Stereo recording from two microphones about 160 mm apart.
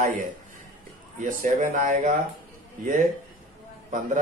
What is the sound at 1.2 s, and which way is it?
Speech, 55° right (ahead or behind).